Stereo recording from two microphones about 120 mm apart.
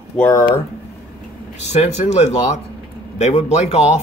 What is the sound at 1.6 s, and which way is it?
Speech, 65° left (ahead or behind).